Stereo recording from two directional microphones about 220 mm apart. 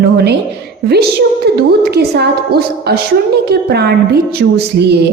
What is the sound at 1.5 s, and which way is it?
A woman's voice, 50° right (ahead or behind).